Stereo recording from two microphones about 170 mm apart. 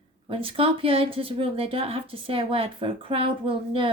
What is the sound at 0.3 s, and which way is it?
Speech, 35° right (ahead or behind).